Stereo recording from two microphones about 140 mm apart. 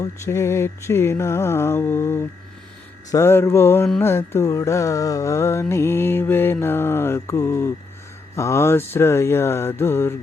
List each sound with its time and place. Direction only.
0.0 s music: 20° left (ahead or behind)
3.1 s mantra: 20° left (ahead or behind)
4.0 s music: 20° left (ahead or behind)
8.4 s mantra: 20° left (ahead or behind)